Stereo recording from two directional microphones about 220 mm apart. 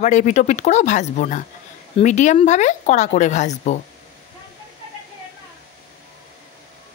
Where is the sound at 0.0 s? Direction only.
35° left (ahead or behind).